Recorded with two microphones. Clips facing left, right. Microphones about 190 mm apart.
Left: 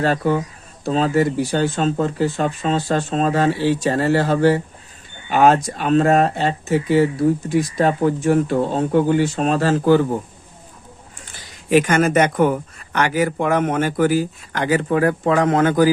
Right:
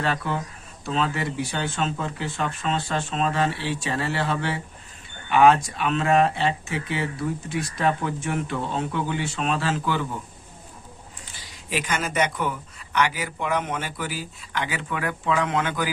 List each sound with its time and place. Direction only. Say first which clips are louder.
0.0 s speech: left 8 dB; 40° left (ahead or behind)
11.7 s speech: left 12 dB; 50° left (ahead or behind)